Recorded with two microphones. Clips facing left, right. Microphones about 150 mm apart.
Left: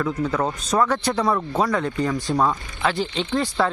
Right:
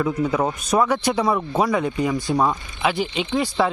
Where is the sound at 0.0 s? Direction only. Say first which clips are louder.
Right 2 dB; 10° right (ahead or behind).